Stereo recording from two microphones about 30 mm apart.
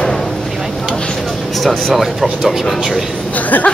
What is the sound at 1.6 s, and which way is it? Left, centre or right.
Speech, centre.